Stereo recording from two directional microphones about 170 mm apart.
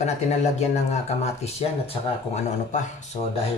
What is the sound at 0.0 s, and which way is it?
Speech, 40° left (ahead or behind).